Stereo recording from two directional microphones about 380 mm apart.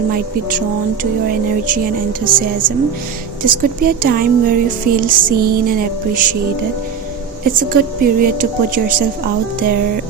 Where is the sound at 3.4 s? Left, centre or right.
Right.